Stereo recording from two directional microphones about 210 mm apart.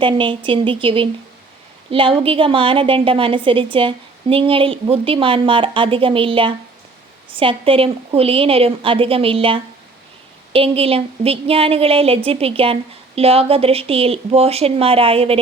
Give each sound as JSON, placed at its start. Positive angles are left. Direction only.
{"t": 0.0, "sound": "speech", "side_deg": -25}